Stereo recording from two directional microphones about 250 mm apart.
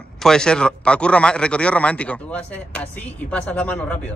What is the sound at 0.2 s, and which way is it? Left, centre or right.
A man's voice, centre.